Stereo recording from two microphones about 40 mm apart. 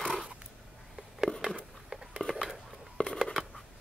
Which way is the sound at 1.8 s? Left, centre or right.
Centre.